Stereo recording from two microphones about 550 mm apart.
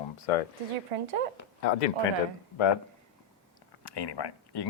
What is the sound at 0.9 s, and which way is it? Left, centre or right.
Speech, right.